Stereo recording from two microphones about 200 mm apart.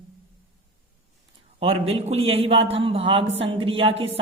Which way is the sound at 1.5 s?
30° right (ahead or behind).